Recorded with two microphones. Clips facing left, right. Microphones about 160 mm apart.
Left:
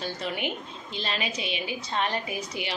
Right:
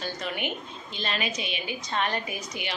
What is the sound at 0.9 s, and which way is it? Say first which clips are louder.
Speech: even; 30° left (ahead or behind).